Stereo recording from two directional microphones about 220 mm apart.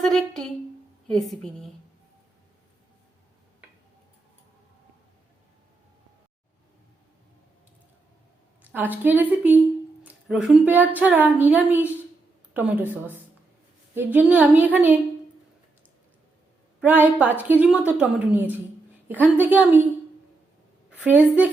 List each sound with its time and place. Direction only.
0.0 s a woman's voice: centre (ahead or behind)
8.6 s a woman's voice: 10° right (ahead or behind)
16.8 s a woman's voice: 10° right (ahead or behind)
21.0 s a woman's voice: 5° right (ahead or behind)